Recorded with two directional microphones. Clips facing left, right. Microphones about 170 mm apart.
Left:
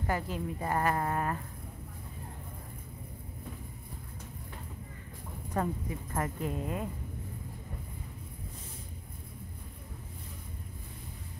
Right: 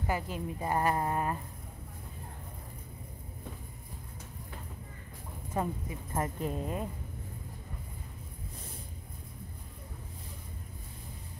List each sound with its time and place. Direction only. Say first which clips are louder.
0.0 s a woman's voice: left 1 dB; 10° right (ahead or behind)
5.5 s a woman's voice: left 1 dB; 15° right (ahead or behind)
6.1 s speech: right 1 dB; 25° right (ahead or behind)